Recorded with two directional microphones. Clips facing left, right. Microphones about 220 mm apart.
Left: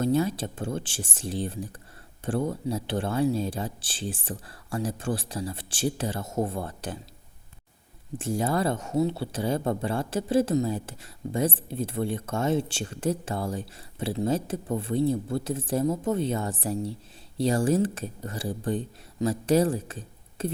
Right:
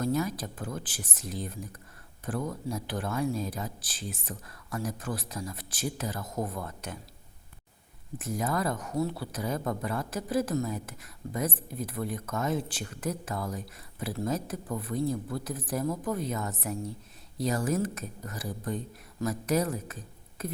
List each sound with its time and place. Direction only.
0.0 s speech: 30° left (ahead or behind)
8.2 s speech: 30° left (ahead or behind)